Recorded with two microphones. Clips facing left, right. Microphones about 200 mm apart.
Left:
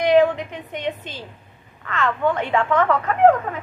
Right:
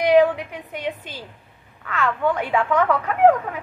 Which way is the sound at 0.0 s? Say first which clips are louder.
Even; 10° right (ahead or behind).